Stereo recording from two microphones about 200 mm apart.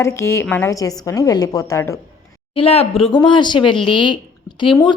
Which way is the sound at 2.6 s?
30° left (ahead or behind).